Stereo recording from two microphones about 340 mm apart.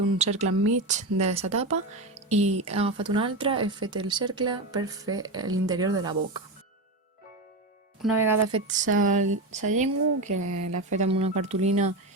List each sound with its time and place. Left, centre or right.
0.2 s speech: centre
8.0 s speech: centre
8.5 s speech: right
10.2 s speech: right
10.9 s speech: centre